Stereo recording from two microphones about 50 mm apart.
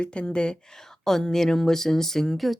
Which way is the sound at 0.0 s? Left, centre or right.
Left.